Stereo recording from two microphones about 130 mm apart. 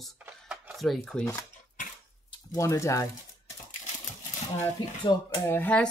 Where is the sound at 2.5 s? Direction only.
25° left (ahead or behind).